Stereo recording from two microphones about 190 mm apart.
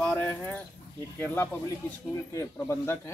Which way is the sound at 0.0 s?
10° left (ahead or behind).